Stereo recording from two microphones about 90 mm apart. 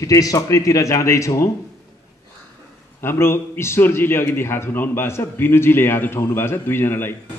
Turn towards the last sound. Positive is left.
turn(degrees=25)  # may be behind; listen again after turning